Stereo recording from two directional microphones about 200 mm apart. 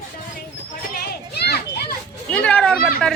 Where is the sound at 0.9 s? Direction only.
50° left (ahead or behind).